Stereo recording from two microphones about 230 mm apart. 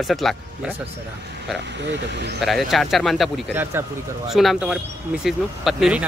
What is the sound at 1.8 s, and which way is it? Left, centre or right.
Speech, right.